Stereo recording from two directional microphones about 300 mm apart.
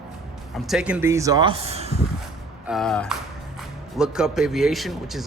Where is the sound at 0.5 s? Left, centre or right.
Centre.